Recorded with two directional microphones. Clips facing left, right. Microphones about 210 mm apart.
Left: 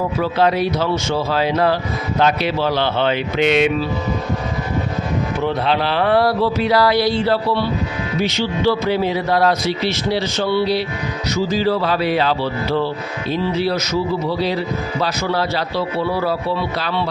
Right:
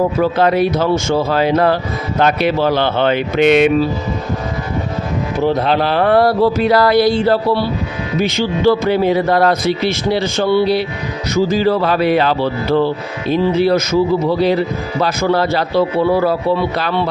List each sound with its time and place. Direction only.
0.2 s speech: 50° right (ahead or behind)
5.4 s speech: 40° right (ahead or behind)